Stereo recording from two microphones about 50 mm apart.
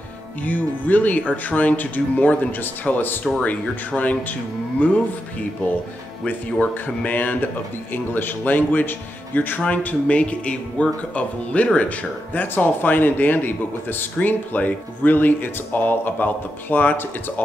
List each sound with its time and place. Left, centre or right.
0.4 s speech: left
6.2 s speech: left
9.6 s speech: left